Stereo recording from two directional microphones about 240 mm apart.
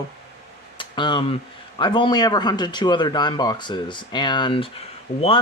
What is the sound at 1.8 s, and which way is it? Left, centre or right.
Speech, centre.